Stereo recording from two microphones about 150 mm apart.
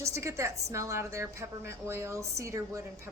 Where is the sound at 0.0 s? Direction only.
20° right (ahead or behind).